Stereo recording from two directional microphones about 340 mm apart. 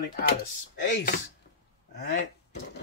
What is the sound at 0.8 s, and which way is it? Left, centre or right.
Speech, left.